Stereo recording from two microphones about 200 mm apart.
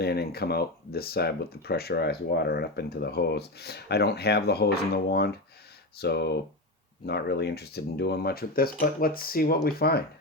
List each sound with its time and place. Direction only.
0.0 s speech: 55° left (ahead or behind)